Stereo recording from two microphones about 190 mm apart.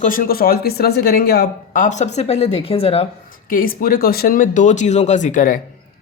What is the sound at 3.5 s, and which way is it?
Speech, 50° left (ahead or behind).